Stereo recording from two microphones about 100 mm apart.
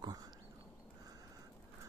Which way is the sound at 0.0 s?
40° right (ahead or behind).